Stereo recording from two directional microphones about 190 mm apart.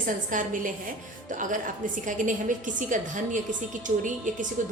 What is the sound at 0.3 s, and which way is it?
A woman's voice, 45° right (ahead or behind).